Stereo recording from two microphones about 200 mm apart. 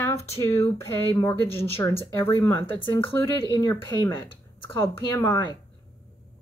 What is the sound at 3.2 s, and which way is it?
Speech, 15° left (ahead or behind).